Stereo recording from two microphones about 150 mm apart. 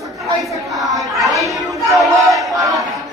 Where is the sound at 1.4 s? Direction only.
20° right (ahead or behind).